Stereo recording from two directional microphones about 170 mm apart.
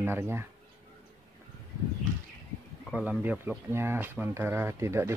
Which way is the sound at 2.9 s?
5° right (ahead or behind).